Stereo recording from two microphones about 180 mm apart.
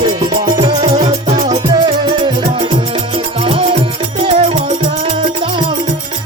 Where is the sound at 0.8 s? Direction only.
40° right (ahead or behind).